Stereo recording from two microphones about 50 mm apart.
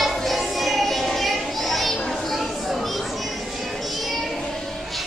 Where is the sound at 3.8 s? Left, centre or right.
Centre.